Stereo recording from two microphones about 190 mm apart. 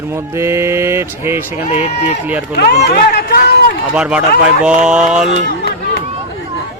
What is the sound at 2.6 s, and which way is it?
Speech, 55° left (ahead or behind).